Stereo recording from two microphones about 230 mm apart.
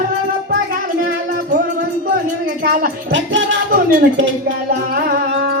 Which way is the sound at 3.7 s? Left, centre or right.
Right.